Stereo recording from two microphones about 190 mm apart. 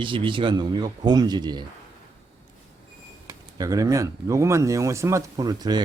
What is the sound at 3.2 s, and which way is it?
Speech, 15° right (ahead or behind).